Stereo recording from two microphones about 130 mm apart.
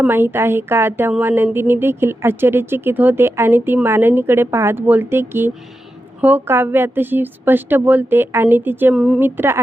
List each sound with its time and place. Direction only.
0.1 s a woman's voice: 15° right (ahead or behind)